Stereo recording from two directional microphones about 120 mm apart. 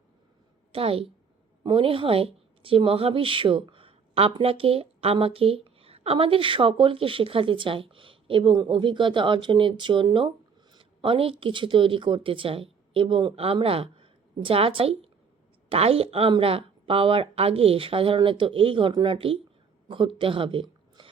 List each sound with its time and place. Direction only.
0.7 s a woman's voice: 50° right (ahead or behind)